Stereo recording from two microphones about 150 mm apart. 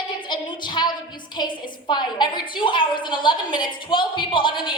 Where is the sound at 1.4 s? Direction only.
30° left (ahead or behind).